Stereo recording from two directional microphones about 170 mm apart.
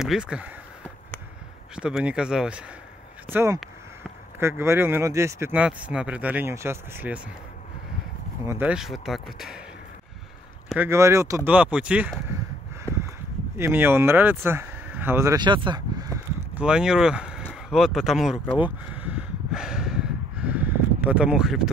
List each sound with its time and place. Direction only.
0.0 s speech: 5° right (ahead or behind)
1.8 s speech: 5° right (ahead or behind)
8.5 s speech: 10° right (ahead or behind)
10.7 s speech: 15° right (ahead or behind)
12.9 s a sound: 10° left (ahead or behind)
13.6 s speech: 10° right (ahead or behind)
16.5 s speech: 5° right (ahead or behind)
17.6 s a sound: centre (ahead or behind)